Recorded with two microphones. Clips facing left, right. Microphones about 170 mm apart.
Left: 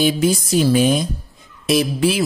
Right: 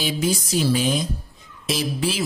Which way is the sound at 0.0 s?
55° left (ahead or behind).